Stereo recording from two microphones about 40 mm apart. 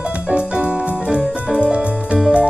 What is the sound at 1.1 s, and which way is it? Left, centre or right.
Music, centre.